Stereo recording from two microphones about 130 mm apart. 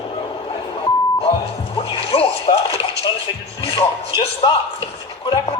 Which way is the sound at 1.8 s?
50° left (ahead or behind).